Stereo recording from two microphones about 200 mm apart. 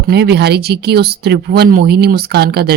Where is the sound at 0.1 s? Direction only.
55° right (ahead or behind).